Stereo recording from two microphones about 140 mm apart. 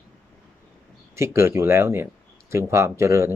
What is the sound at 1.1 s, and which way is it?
Speech, 20° right (ahead or behind).